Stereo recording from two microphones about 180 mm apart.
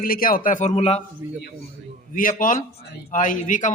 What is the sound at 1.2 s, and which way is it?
Speech, 15° right (ahead or behind).